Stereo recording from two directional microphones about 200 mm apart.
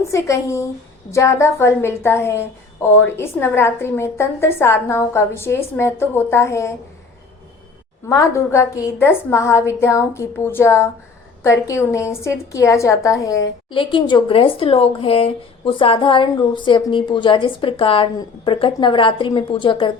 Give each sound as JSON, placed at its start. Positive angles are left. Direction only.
{"t": 0.1, "sound": "a woman's voice", "side_deg": 15}
{"t": 8.1, "sound": "a woman's voice", "side_deg": 15}